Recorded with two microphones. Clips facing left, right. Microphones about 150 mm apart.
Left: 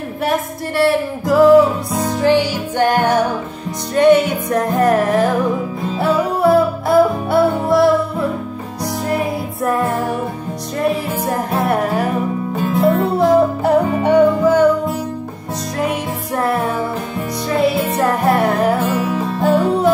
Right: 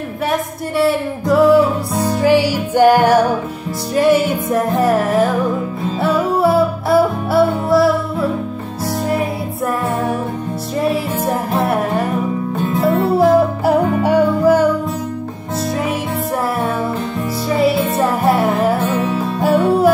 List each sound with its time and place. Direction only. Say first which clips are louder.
0.3 s music: even; centre (ahead or behind)
11.2 s music: left 1 dB; centre (ahead or behind)
17.6 s music: right 1 dB; centre (ahead or behind)
19.1 s music: even; 5° right (ahead or behind)